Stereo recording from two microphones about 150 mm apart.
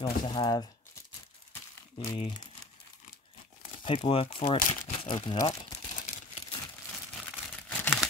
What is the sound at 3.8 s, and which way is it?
Speech, 35° left (ahead or behind).